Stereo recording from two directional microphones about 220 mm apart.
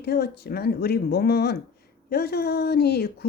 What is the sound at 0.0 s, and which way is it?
Speech, 45° left (ahead or behind).